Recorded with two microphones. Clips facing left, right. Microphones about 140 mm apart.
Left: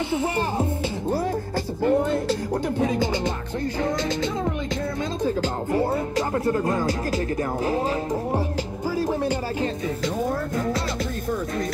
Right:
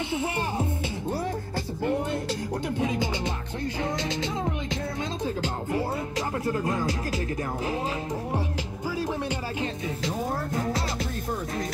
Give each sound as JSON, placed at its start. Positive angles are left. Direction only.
{"t": 0.1, "sound": "music", "side_deg": 35}
{"t": 1.8, "sound": "music", "side_deg": 40}
{"t": 5.4, "sound": "music", "side_deg": 40}
{"t": 8.9, "sound": "music", "side_deg": 40}